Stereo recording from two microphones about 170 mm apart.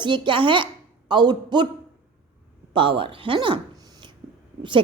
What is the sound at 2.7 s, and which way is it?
A woman's voice, 30° right (ahead or behind).